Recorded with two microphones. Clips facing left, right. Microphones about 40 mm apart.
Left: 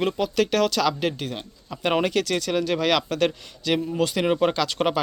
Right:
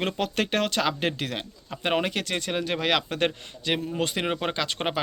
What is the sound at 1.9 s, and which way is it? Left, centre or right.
A man's voice, centre.